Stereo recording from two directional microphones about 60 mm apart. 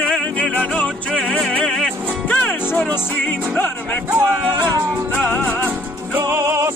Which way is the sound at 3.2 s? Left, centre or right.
Left.